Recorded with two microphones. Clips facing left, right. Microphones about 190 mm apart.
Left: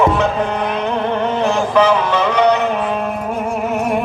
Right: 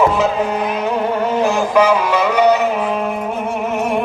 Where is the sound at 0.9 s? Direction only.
5° right (ahead or behind).